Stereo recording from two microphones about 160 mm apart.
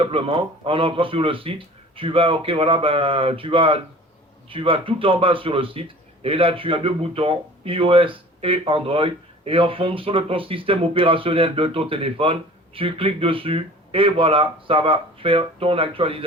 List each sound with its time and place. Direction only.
0.0 s speech: 35° right (ahead or behind)